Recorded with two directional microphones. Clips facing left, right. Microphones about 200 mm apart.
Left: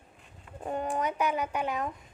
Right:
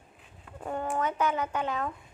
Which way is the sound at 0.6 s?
20° left (ahead or behind).